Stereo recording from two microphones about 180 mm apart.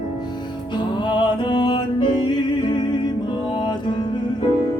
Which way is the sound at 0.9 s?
25° left (ahead or behind).